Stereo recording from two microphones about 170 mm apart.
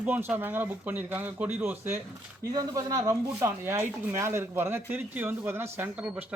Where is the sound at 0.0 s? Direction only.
10° right (ahead or behind).